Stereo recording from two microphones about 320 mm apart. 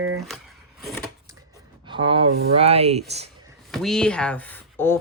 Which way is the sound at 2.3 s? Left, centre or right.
Centre.